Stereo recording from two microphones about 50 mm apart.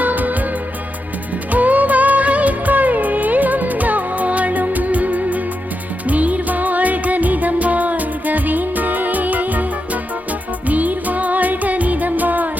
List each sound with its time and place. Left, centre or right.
0.0 s music: right
1.5 s music: right